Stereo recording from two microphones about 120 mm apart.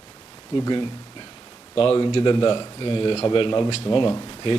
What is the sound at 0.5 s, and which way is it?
A man's voice, 40° left (ahead or behind).